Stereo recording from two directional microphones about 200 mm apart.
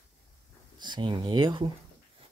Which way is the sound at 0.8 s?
25° right (ahead or behind).